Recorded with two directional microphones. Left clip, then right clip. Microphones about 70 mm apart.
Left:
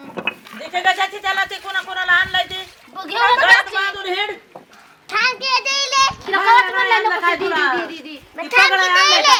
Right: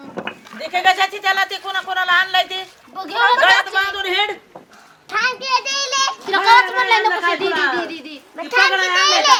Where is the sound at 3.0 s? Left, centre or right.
Centre.